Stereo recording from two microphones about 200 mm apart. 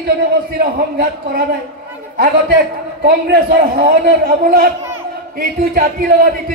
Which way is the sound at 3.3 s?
50° right (ahead or behind).